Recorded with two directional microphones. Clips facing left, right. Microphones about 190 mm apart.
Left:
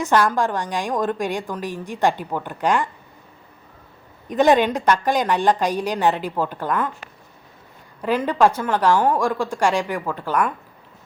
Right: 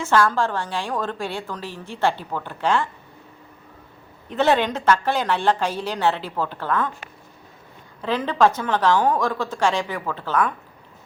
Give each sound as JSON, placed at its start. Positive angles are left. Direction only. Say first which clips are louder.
{"t": 0.0, "sound": "a woman's voice", "louder": "left 1 dB", "side_deg": 15}
{"t": 4.3, "sound": "a woman's voice", "louder": "left 4 dB", "side_deg": 15}
{"t": 8.0, "sound": "a woman's voice", "louder": "left 1 dB", "side_deg": 10}